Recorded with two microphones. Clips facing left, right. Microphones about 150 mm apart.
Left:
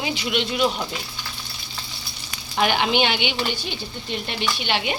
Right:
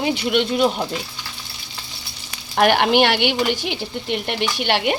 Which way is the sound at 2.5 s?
60° right (ahead or behind).